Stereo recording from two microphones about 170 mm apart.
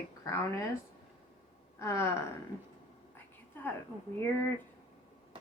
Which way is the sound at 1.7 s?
15° left (ahead or behind).